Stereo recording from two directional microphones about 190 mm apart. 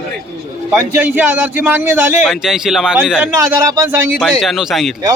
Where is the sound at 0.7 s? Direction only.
5° right (ahead or behind).